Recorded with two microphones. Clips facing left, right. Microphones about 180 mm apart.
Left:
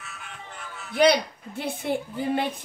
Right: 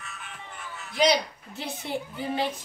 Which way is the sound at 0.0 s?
Centre (ahead or behind).